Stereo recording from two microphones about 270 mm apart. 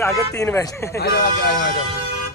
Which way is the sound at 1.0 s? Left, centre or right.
Left.